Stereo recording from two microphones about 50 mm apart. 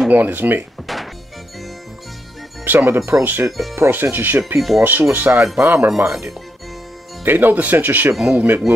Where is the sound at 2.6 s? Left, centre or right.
Right.